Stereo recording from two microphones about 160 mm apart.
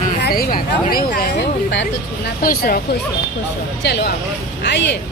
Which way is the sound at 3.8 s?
90° left.